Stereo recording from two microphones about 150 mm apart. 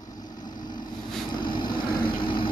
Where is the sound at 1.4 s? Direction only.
30° left (ahead or behind).